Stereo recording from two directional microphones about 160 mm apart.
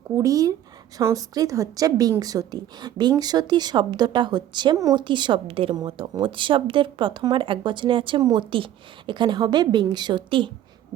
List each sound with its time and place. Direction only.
0.2 s a woman's voice: 20° right (ahead or behind)